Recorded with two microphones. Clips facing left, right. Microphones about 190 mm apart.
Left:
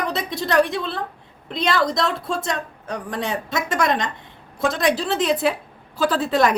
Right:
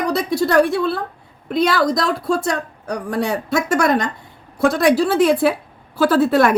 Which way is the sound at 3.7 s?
5° right (ahead or behind).